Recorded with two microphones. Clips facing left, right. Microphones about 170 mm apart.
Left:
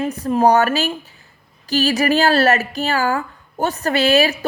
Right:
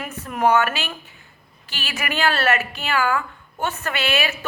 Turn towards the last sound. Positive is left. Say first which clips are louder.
# left 8 dB
turn(degrees=40)  # may be behind; listen again after turning